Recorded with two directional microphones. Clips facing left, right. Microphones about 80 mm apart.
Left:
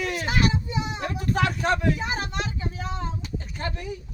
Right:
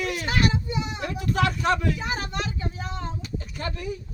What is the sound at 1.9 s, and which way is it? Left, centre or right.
Speech, left.